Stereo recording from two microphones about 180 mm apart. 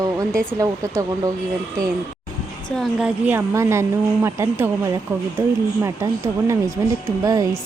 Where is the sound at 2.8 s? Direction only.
5° right (ahead or behind).